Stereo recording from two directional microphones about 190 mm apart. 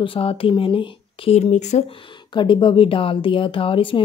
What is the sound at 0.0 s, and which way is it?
Speech, 30° left (ahead or behind).